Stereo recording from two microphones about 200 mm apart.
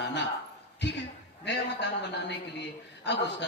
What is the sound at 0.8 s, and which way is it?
A woman's voice, 60° left (ahead or behind).